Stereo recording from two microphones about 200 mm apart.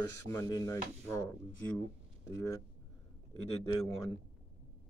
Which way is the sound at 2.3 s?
15° left (ahead or behind).